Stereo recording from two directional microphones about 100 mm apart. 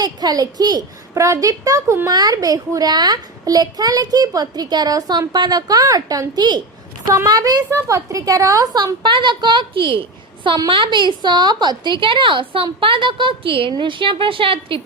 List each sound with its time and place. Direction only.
0.0 s a child's voice: 40° right (ahead or behind)
9.0 s a woman's voice: 50° right (ahead or behind)